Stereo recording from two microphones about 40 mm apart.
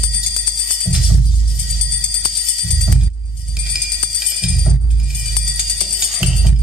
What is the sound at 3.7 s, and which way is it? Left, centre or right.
Music, centre.